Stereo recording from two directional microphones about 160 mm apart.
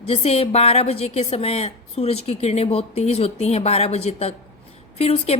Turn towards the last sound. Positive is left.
turn(degrees=40)  # may be behind; listen again after turning